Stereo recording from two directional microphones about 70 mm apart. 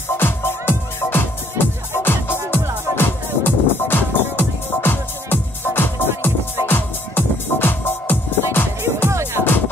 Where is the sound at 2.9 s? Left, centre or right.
Left.